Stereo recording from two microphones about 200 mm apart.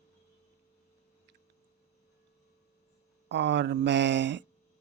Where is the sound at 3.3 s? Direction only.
60° right (ahead or behind).